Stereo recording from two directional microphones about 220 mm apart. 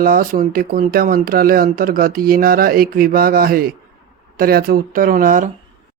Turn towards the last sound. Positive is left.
turn(degrees=-35)  # may be behind; listen again after turning